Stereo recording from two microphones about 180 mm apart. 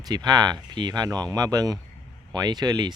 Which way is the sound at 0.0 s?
20° right (ahead or behind).